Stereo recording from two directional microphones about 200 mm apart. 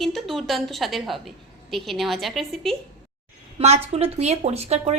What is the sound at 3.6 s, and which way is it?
Speech, 30° right (ahead or behind).